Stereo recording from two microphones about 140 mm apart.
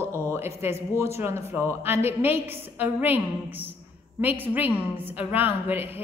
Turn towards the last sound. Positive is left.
turn(degrees=-15)  # may be behind; listen again after turning